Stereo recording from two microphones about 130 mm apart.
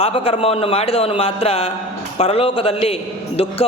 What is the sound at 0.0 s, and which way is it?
A man's voice, 45° left (ahead or behind).